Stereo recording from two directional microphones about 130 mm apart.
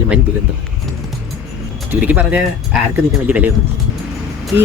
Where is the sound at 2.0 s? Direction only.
15° right (ahead or behind).